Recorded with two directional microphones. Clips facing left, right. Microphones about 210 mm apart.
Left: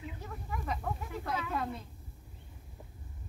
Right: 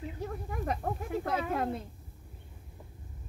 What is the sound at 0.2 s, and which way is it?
Snake, 45° right (ahead or behind).